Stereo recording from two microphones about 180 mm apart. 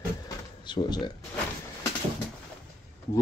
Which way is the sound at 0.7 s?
25° left (ahead or behind).